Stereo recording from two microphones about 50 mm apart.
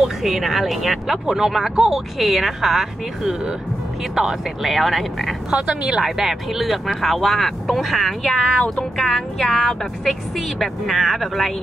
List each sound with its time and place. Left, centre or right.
0.0 s speech: centre
5.5 s speech: centre
6.0 s speech: centre